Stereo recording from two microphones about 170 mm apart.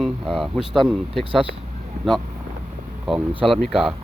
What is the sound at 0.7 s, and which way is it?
Speech, centre (ahead or behind).